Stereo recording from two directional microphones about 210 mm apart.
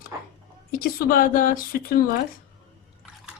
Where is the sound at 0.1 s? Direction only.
10° right (ahead or behind).